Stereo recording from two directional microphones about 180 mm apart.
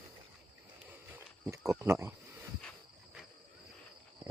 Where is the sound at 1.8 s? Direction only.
15° right (ahead or behind).